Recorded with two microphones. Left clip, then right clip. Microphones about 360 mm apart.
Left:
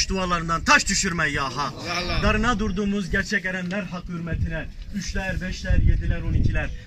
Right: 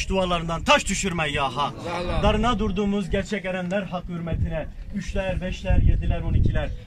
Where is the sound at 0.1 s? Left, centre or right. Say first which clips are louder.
Even; right.